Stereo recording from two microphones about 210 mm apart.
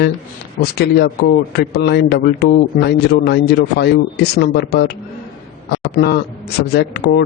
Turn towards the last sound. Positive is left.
turn(degrees=50)  # may be behind; listen again after turning